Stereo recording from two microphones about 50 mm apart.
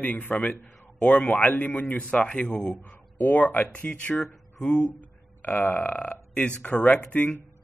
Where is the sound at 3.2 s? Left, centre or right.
Left.